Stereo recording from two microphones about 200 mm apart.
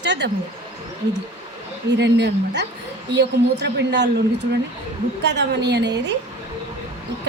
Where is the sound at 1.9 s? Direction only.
60° right (ahead or behind).